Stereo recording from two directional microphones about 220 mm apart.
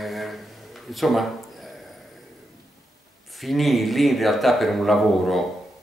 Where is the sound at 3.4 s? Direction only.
Centre (ahead or behind).